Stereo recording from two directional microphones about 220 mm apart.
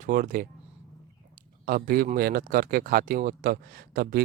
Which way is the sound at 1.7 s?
40° right (ahead or behind).